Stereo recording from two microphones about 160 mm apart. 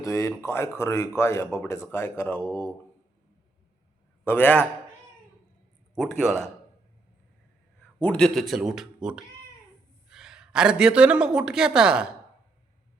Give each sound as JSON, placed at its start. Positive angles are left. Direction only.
{"t": 0.0, "sound": "speech", "side_deg": 15}
{"t": 4.2, "sound": "a man's voice", "side_deg": 15}
{"t": 5.9, "sound": "a man's voice", "side_deg": 5}
{"t": 7.9, "sound": "a woman's voice", "side_deg": 10}